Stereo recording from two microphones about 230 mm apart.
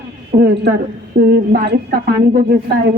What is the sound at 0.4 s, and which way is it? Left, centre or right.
A man's voice, right.